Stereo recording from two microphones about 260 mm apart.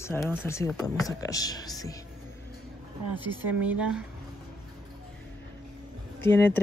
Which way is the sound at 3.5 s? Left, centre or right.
Centre.